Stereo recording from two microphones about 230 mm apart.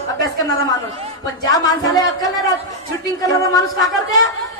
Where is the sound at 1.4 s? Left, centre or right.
Centre.